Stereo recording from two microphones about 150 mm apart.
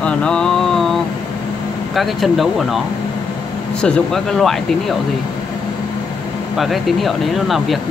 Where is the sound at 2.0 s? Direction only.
Centre (ahead or behind).